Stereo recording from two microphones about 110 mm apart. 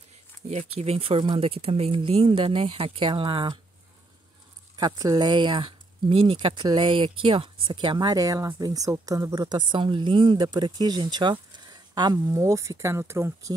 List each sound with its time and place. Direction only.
0.5 s speech: 85° right; by 3.5 s 50° right (ahead or behind)
4.7 s speech: 40° right (ahead or behind)